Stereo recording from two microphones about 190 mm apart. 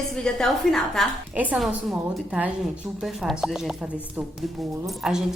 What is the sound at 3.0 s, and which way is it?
Speech, centre (ahead or behind).